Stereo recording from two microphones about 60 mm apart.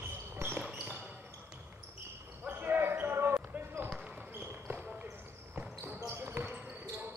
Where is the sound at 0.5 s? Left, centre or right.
Centre.